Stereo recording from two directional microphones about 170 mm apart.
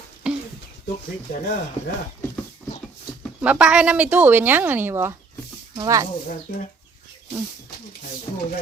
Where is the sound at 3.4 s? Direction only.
5° right (ahead or behind).